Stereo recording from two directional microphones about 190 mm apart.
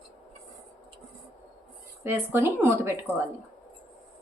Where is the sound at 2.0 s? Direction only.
10° right (ahead or behind).